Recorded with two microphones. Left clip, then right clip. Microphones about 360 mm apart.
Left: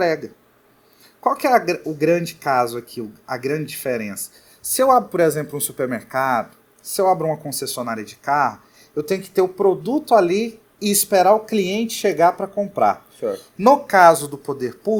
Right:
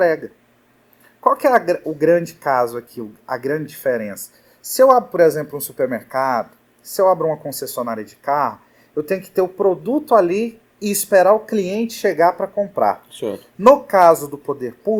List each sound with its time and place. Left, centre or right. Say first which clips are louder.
0.0 s speech: right 3 dB; left
4.7 s speech: right 3 dB; left
13.7 s speech: right 1 dB; left